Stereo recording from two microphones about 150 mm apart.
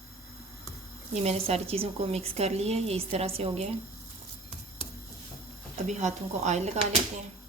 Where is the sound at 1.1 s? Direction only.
45° right (ahead or behind).